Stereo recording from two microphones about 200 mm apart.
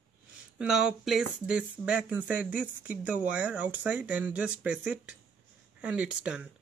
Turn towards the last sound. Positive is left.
turn(degrees=-5)  # may be behind; listen again after turning